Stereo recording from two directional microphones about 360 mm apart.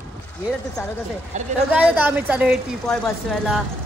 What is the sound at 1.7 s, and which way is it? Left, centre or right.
Speech, centre.